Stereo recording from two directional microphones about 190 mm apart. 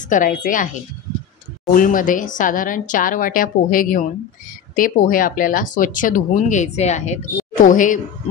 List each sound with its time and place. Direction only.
0.0 s speech: 45° left (ahead or behind)
1.7 s speech: 45° left (ahead or behind)